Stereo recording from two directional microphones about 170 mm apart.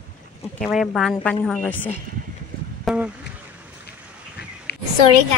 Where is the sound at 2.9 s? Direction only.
Centre (ahead or behind).